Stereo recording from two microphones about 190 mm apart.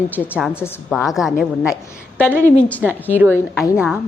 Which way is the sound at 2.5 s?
5° left (ahead or behind).